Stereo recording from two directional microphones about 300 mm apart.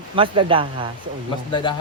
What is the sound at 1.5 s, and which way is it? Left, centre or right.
Speech, centre.